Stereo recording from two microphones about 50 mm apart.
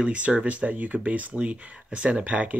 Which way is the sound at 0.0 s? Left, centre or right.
Right.